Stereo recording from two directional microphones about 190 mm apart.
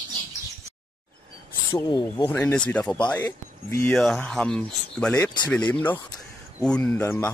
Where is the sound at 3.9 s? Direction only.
Centre (ahead or behind).